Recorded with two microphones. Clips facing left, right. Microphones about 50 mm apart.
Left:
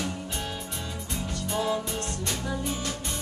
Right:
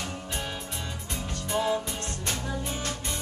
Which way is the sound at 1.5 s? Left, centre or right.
Centre.